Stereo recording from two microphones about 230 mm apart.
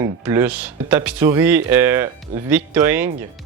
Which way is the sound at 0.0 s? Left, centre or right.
Centre.